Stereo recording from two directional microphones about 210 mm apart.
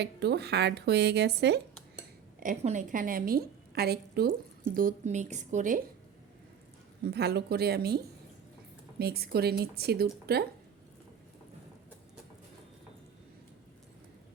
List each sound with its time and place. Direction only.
0.0 s speech: 50° right (ahead or behind)
2.4 s a woman's voice: 40° right (ahead or behind)
7.0 s speech: 50° right (ahead or behind)